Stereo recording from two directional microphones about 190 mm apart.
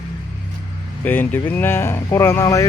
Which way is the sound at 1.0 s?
10° left (ahead or behind).